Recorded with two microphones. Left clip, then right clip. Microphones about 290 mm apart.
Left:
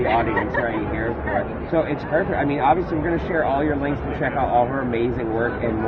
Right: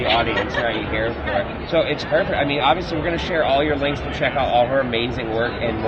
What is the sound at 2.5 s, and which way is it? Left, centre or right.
A man's voice, right.